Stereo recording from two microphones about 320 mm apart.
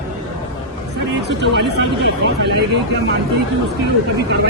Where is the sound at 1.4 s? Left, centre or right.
Right.